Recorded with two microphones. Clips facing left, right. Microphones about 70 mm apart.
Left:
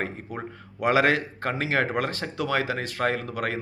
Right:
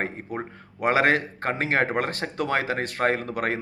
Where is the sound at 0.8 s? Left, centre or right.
Right.